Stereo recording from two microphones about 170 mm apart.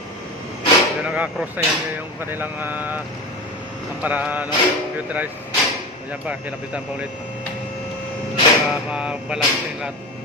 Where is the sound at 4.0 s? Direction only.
10° right (ahead or behind).